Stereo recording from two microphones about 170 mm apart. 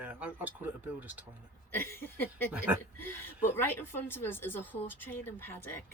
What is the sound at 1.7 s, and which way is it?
Speech, 15° left (ahead or behind).